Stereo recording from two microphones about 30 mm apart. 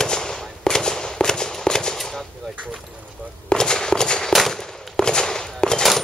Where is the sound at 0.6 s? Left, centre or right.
Left.